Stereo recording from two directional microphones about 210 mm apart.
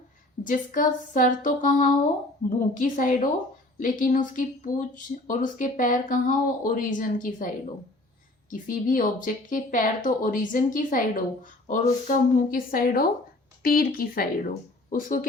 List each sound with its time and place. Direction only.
0.4 s speech: 40° left (ahead or behind)